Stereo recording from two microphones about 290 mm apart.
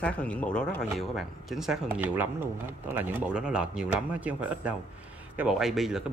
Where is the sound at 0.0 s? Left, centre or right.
Centre.